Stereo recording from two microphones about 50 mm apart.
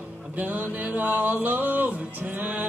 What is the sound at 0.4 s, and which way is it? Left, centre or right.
Music, right.